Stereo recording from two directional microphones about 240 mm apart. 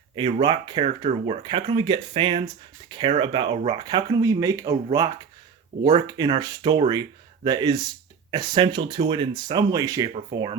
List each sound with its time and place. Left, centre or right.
0.2 s speech: centre